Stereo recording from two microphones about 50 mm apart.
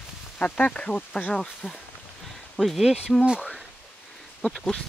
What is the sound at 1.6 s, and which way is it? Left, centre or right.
Speech, centre.